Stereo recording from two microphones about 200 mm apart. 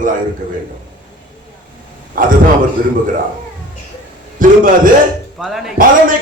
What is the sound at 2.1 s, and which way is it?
Speech, 45° right (ahead or behind).